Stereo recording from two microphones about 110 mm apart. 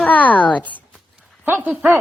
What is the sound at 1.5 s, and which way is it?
Speech, 15° right (ahead or behind).